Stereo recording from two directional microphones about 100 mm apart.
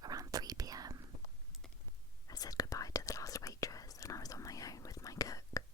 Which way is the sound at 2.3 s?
40° left (ahead or behind).